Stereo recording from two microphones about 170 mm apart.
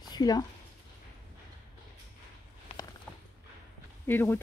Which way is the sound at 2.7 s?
30° left (ahead or behind).